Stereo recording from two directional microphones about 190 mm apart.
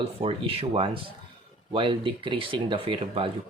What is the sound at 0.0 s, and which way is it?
A man's voice, 30° right (ahead or behind).